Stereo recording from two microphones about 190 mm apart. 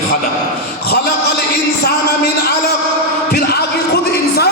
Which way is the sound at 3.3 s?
55° left (ahead or behind).